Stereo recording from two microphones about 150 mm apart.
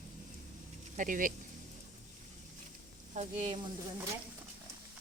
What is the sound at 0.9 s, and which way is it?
Speech, 60° right (ahead or behind).